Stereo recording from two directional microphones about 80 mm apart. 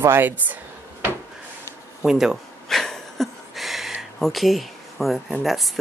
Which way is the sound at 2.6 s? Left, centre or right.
Centre.